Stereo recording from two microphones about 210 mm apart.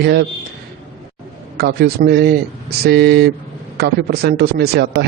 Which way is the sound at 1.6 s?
50° right (ahead or behind).